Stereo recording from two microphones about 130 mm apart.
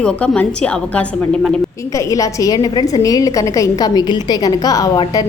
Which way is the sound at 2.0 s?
25° left (ahead or behind).